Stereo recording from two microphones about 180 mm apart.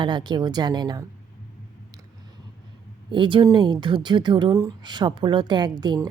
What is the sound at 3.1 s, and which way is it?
A woman's voice, 25° right (ahead or behind).